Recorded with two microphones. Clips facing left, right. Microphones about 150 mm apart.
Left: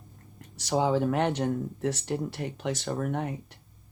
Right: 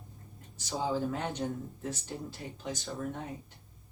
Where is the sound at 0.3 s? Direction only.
75° left (ahead or behind).